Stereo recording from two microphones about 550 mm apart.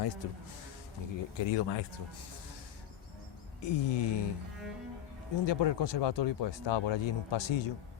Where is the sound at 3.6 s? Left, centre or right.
Left.